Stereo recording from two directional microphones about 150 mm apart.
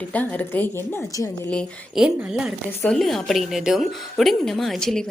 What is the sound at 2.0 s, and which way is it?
Speech, 5° right (ahead or behind).